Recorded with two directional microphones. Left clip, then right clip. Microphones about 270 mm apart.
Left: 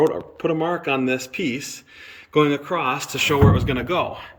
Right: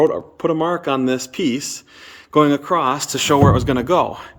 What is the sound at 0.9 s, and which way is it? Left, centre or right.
Speech, centre.